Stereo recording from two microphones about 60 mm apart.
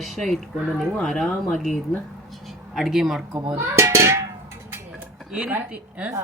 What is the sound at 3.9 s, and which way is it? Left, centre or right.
Cowbell, right.